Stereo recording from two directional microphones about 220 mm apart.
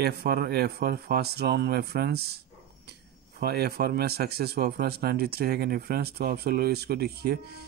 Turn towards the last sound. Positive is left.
turn(degrees=-45)  # may be behind; listen again after turning